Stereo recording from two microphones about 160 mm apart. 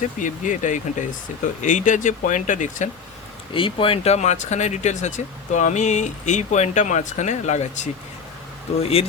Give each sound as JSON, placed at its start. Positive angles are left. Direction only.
{"t": 0.2, "sound": "speech", "side_deg": 50}
{"t": 3.5, "sound": "speech", "side_deg": 35}